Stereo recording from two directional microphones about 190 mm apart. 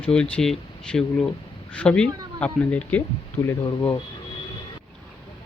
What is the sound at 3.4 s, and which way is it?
Speech, 30° left (ahead or behind).